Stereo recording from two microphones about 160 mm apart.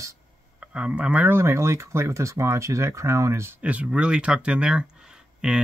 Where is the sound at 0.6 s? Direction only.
5° right (ahead or behind).